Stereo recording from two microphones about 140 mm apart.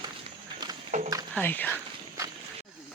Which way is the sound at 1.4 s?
10° left (ahead or behind).